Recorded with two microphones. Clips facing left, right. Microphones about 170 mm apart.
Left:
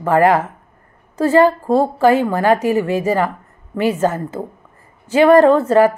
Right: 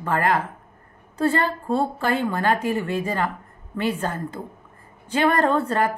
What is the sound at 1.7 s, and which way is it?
A woman's voice, 90° left.